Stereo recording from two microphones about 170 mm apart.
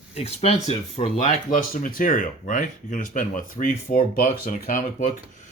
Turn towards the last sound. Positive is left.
turn(degrees=55)  # may be behind; listen again after turning